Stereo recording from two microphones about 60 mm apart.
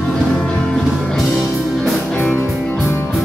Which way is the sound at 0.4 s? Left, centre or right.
Centre.